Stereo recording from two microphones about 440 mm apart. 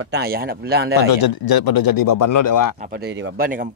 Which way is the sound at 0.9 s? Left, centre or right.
Left.